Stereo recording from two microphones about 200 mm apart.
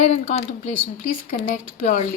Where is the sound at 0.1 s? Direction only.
35° left (ahead or behind).